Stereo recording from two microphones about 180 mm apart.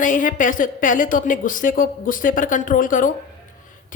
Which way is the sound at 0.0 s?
45° left (ahead or behind).